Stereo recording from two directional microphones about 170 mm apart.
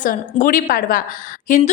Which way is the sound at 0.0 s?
50° left (ahead or behind).